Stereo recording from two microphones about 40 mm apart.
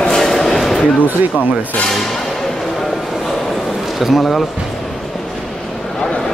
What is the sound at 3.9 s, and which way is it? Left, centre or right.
Speech, centre.